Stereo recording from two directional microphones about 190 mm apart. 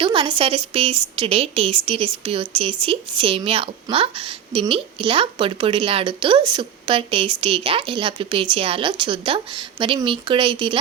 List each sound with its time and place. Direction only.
0.0 s a woman's voice: 25° right (ahead or behind)